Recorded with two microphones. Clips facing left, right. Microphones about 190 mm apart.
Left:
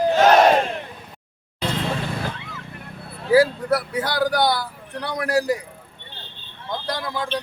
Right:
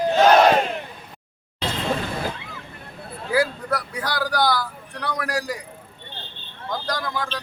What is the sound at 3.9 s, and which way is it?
A man's voice, 25° left (ahead or behind).